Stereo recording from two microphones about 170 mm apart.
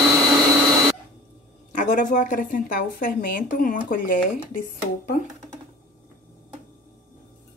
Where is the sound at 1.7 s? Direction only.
50° left (ahead or behind).